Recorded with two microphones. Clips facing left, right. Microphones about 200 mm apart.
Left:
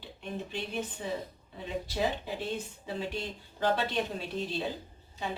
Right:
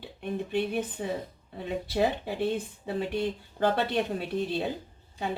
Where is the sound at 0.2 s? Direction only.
55° right (ahead or behind).